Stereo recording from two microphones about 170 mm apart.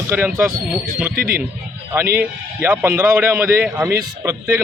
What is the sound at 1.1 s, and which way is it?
Speech, 60° right (ahead or behind).